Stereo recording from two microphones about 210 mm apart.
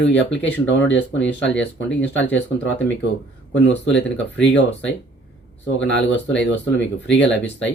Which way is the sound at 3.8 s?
60° left (ahead or behind).